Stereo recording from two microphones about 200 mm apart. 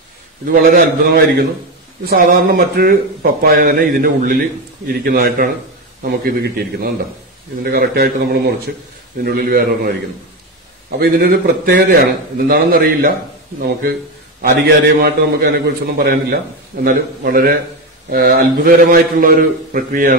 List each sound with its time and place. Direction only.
0.6 s speech: 50° right (ahead or behind)
11.0 s speech: 50° right (ahead or behind)